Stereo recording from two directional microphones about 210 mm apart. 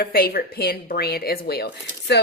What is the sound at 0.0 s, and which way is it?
Speech, 45° left (ahead or behind).